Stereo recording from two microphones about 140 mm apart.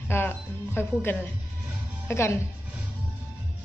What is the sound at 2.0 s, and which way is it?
Speech, 20° left (ahead or behind).